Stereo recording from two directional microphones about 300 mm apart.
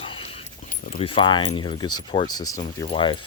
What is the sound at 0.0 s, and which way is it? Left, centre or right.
Speech, centre.